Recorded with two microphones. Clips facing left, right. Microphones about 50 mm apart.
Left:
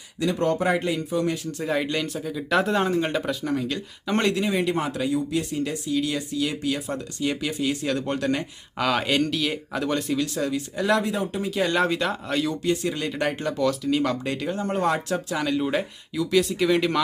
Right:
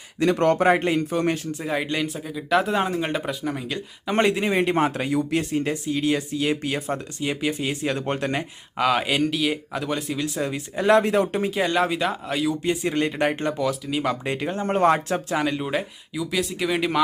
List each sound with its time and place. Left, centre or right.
0.2 s a man's voice: right
0.7 s speech: right
1.5 s speech: centre
4.4 s speech: right
7.2 s speech: right
8.8 s speech: centre
10.2 s speech: right
11.0 s a man's voice: right
11.5 s speech: centre
12.6 s speech: right
13.6 s speech: centre
14.3 s speech: right
15.4 s speech: centre